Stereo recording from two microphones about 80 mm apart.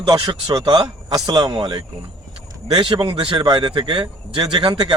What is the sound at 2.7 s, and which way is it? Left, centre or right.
A man's voice, right.